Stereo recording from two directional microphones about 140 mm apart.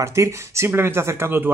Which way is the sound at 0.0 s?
20° right (ahead or behind).